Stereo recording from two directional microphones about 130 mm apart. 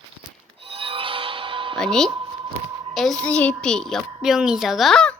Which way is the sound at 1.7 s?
5° left (ahead or behind).